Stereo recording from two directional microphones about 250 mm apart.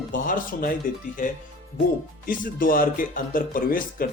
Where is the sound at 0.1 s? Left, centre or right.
Left.